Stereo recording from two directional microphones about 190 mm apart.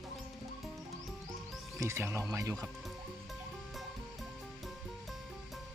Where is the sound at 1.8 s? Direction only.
15° right (ahead or behind).